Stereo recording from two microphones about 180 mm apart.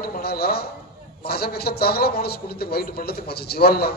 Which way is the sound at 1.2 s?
60° left (ahead or behind).